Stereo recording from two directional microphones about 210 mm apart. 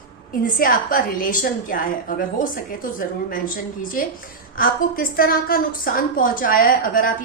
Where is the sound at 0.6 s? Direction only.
40° left (ahead or behind).